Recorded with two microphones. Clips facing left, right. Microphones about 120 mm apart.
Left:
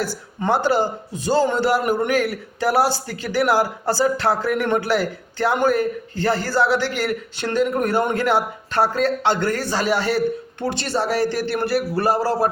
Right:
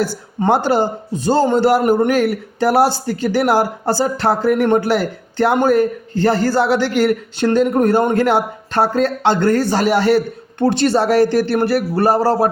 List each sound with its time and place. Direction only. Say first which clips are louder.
0.0 s a woman's voice: right 6 dB; 25° right (ahead or behind)
0.4 s a man's voice: right 4 dB; 65° right (ahead or behind)